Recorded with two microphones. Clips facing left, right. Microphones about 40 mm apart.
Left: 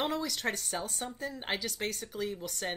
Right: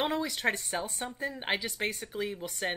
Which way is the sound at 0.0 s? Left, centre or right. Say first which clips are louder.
Right 3 dB; right.